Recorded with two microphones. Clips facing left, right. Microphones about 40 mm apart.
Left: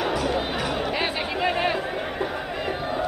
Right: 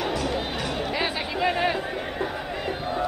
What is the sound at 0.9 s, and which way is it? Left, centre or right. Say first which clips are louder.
Chatter: left 1 dB; left.